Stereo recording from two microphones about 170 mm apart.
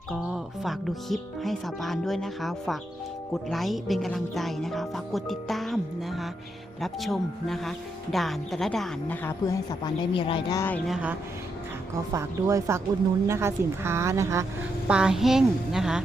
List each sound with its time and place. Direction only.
0.1 s speech: centre (ahead or behind)
9.2 s speech: 20° left (ahead or behind)
10.8 s a woman's voice: 5° right (ahead or behind)
12.1 s a woman's voice: 20° right (ahead or behind)
14.8 s speech: 5° right (ahead or behind)